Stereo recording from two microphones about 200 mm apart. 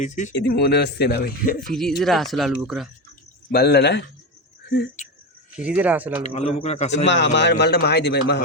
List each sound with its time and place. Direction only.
0.0 s a man's voice: 35° left (ahead or behind)
0.3 s a man's voice: 55° left (ahead or behind)
2.0 s speech: centre (ahead or behind)
3.5 s a man's voice: 55° left (ahead or behind)
5.0 s speech: 35° left (ahead or behind)
5.5 s speech: 5° right (ahead or behind)
6.2 s a man's voice: 30° left (ahead or behind)
6.9 s a man's voice: 65° left (ahead or behind)